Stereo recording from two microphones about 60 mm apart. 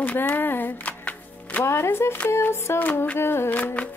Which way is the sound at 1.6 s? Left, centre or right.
Left.